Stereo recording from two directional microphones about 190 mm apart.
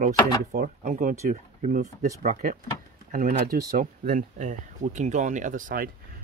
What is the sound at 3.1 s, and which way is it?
Speech, 50° right (ahead or behind).